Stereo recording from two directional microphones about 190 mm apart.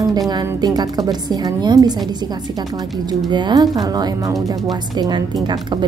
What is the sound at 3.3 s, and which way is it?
A woman's voice, 20° right (ahead or behind).